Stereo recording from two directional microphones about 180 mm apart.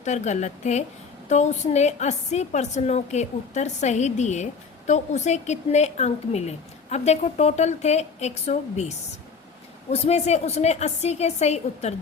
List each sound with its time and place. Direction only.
0.0 s a woman's voice: 40° left (ahead or behind)
9.9 s a woman's voice: 35° left (ahead or behind)